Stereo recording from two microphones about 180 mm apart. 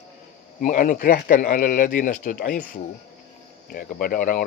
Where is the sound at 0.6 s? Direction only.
45° left (ahead or behind).